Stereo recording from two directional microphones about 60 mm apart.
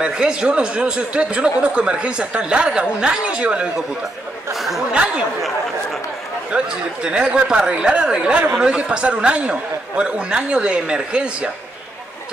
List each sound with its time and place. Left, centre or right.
0.0 s speech: centre
4.6 s a sound: centre
4.9 s speech: centre
6.5 s speech: centre